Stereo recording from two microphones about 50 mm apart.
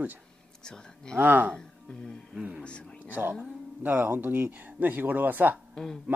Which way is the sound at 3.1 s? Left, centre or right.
Right.